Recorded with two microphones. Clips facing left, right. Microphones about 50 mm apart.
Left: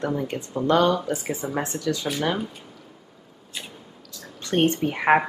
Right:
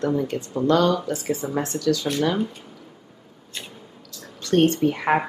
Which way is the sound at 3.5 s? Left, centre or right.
Centre.